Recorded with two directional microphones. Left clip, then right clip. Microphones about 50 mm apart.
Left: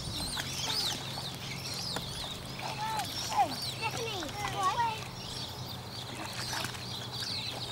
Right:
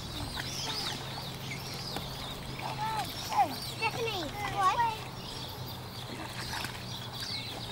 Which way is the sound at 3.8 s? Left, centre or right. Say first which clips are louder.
Right 5 dB; centre.